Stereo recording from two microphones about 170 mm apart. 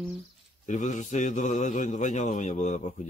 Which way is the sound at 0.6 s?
45° left (ahead or behind).